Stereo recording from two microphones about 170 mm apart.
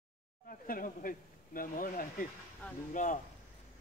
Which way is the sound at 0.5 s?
55° left (ahead or behind).